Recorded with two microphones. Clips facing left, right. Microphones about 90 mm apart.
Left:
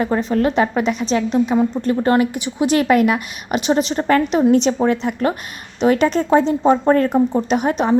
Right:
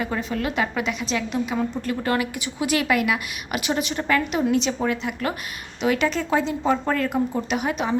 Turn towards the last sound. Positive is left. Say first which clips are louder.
# left 7 dB
turn(degrees=40)  # may be behind; listen again after turning